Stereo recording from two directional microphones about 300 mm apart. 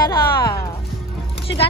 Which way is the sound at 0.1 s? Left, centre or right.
Centre.